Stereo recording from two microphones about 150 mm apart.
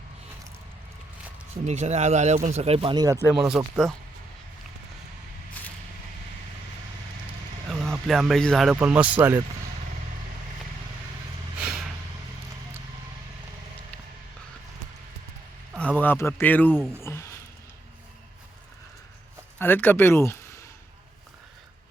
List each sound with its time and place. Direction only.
1.6 s speech: 50° right (ahead or behind); by 3.2 s 30° right (ahead or behind)
3.3 s speech: 5° right (ahead or behind)
7.7 s speech: centre (ahead or behind)
11.6 s vehicle: centre (ahead or behind)
16.0 s speech: 15° left (ahead or behind)
17.0 s a sound: 20° left (ahead or behind)
19.5 s speech: 15° left (ahead or behind)